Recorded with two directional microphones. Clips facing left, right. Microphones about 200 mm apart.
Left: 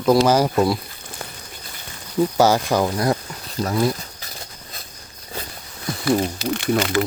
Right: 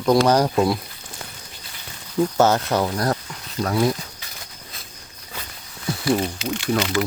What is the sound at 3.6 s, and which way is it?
Speech, centre (ahead or behind).